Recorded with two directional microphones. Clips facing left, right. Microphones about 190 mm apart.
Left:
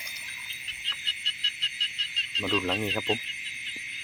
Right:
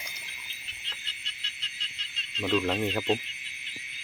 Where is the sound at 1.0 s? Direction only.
35° left (ahead or behind).